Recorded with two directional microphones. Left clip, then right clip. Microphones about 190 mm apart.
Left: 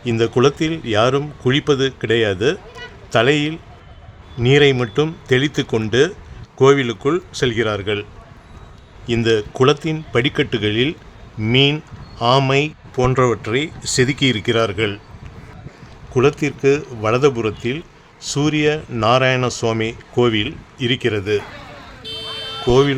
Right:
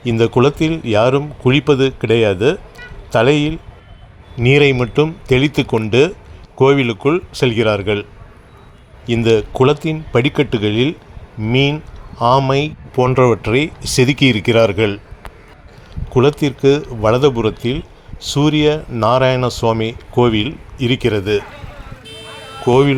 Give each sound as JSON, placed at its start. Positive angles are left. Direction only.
{"t": 0.0, "sound": "speech", "side_deg": -15}
{"t": 9.2, "sound": "speech", "side_deg": -10}
{"t": 12.1, "sound": "speech", "side_deg": -10}
{"t": 16.1, "sound": "speech", "side_deg": -15}
{"t": 22.6, "sound": "speech", "side_deg": -15}